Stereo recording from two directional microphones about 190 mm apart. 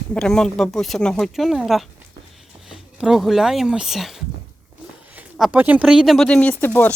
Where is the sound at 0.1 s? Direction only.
5° left (ahead or behind).